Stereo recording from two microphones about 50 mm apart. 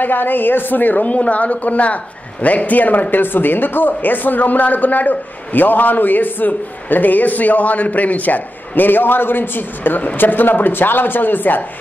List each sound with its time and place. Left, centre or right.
0.0 s speech: left